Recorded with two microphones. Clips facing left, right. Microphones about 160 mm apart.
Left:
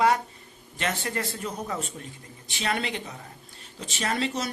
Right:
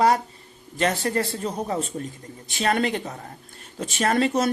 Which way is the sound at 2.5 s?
45° right (ahead or behind).